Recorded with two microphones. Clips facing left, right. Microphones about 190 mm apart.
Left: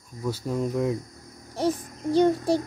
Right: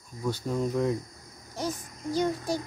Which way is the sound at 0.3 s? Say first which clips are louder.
Left 1 dB; 5° left (ahead or behind).